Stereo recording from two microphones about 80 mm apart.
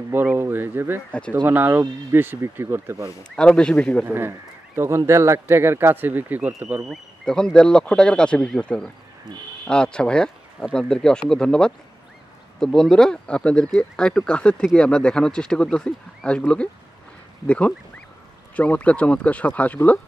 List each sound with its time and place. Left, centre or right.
0.1 s a sound: right
1.3 s speech: right
3.3 s speech: centre
4.0 s speech: right
7.2 s speech: centre